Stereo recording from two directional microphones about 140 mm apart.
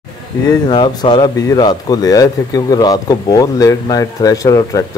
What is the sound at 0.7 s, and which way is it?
Speech, 35° left (ahead or behind).